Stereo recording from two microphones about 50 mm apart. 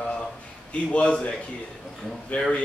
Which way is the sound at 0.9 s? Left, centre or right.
Left.